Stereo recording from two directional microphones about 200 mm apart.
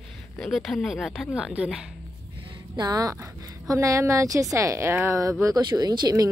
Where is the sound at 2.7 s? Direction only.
20° right (ahead or behind).